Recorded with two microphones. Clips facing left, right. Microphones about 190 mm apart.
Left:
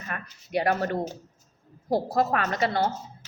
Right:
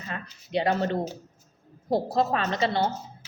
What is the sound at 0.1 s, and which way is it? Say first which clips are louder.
Speech: even; 25° right (ahead or behind).